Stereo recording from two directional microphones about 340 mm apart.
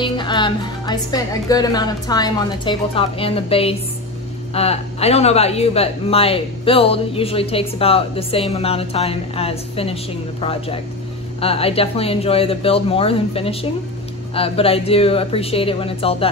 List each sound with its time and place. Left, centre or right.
0.0 s speech: centre
11.4 s speech: centre